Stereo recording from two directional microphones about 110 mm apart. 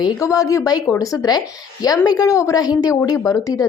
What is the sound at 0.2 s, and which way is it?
A woman's voice, 30° left (ahead or behind).